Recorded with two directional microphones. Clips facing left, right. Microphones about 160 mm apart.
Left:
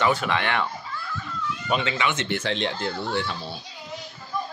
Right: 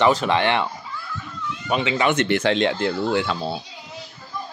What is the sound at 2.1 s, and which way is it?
Speech, 70° right (ahead or behind).